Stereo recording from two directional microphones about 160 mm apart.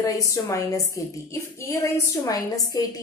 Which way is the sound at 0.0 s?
20° left (ahead or behind).